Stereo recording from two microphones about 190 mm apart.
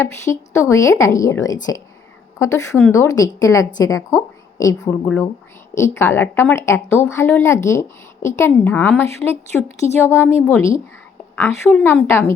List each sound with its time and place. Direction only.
0.0 s a woman's voice: 15° left (ahead or behind)